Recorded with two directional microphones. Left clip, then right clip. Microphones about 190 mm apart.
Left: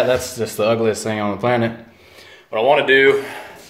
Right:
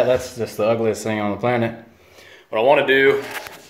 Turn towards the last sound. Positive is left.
turn(degrees=-5)  # may be behind; listen again after turning